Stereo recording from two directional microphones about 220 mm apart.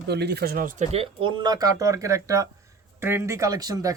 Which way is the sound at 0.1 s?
50° right (ahead or behind).